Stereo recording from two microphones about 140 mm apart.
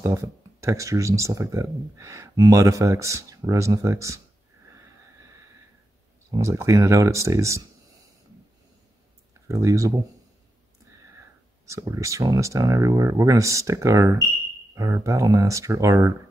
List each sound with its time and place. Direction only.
0.0 s speech: 20° right (ahead or behind)
6.3 s speech: 20° right (ahead or behind)
9.5 s speech: 20° right (ahead or behind)
11.6 s speech: 20° right (ahead or behind)